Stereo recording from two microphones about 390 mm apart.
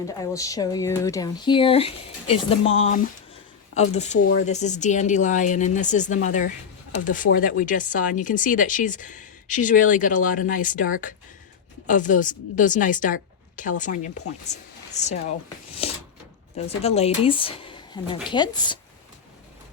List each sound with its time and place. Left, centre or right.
0.2 s speech: centre
15.8 s a sound: centre
16.6 s speech: centre